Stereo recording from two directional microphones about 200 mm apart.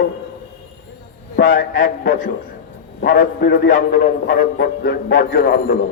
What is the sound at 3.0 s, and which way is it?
A man's voice, 60° left (ahead or behind).